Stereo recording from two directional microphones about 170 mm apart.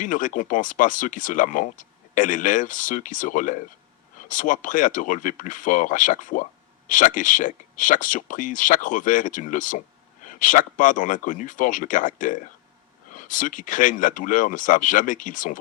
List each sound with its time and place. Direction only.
0.0 s speech: 50° left (ahead or behind)